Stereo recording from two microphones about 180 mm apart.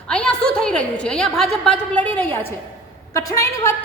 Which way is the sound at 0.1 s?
5° left (ahead or behind).